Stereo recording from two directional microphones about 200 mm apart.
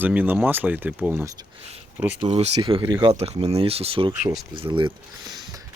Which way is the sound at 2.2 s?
30° right (ahead or behind).